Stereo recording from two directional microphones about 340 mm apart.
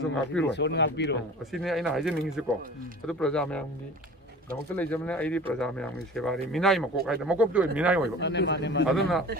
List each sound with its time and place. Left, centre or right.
0.0 s speech: centre
0.5 s speech: left
1.5 s speech: centre
4.7 s speech: centre
8.2 s speech: left
8.8 s speech: centre